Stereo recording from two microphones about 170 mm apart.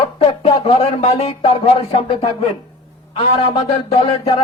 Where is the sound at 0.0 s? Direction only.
30° left (ahead or behind).